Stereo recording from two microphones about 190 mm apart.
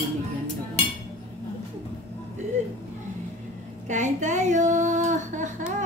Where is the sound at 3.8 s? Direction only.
40° right (ahead or behind).